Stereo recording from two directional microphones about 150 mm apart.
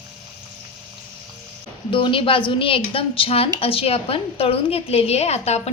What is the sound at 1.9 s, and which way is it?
A woman's voice, 35° left (ahead or behind).